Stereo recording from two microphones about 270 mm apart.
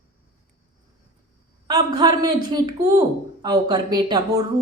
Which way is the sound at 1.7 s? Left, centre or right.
Centre.